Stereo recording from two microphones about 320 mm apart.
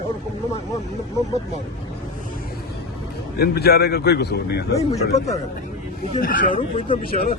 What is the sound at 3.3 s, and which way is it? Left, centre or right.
A man's voice, left.